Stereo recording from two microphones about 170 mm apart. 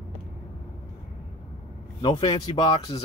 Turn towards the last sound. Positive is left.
turn(degrees=25)  # may be behind; listen again after turning